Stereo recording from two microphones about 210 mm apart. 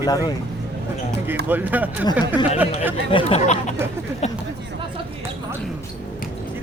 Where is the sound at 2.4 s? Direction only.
20° left (ahead or behind).